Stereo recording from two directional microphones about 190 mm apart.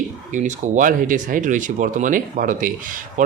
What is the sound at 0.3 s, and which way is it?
Speech, 40° right (ahead or behind).